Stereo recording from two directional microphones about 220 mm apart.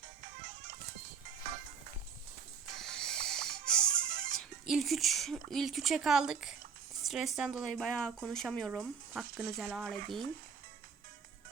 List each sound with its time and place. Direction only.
2.7 s music: centre (ahead or behind)
7.0 s speech: centre (ahead or behind)